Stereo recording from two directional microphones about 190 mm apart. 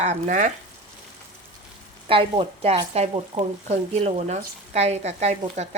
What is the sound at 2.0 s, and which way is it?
Speech, 30° right (ahead or behind).